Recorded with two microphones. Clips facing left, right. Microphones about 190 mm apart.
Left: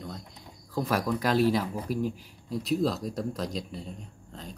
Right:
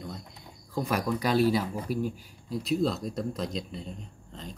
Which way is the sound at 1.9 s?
40° left (ahead or behind).